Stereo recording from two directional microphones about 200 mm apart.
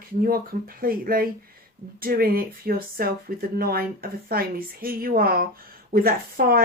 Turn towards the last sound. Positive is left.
turn(degrees=-50)  # may be behind; listen again after turning